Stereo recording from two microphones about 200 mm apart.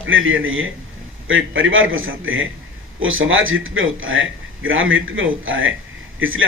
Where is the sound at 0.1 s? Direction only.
80° right.